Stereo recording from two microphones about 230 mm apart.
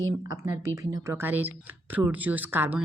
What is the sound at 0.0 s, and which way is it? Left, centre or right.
Speech, centre.